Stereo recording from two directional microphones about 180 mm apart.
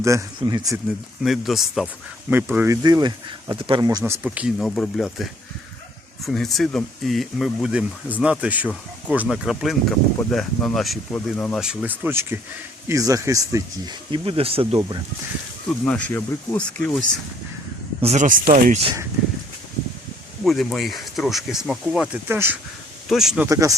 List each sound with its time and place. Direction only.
0.0 s speech: 15° right (ahead or behind)
1.2 s speech: centre (ahead or behind)
2.8 s speech: 20° right (ahead or behind)
4.3 s speech: 5° right (ahead or behind)
11.6 s speech: 5° right (ahead or behind); by 14.8 s 30° right (ahead or behind)
15.8 s speech: 10° left (ahead or behind)
18.0 s speech: 40° right (ahead or behind)
20.4 s speech: centre (ahead or behind)
23.5 s speech: 20° right (ahead or behind)